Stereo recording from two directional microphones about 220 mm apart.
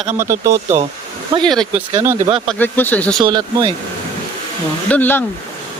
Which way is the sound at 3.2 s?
20° right (ahead or behind).